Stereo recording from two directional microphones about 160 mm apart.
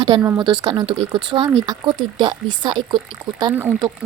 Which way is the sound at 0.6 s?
30° right (ahead or behind).